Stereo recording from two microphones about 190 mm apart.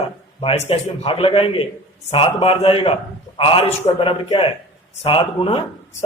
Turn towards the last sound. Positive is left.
turn(degrees=30)  # may be behind; listen again after turning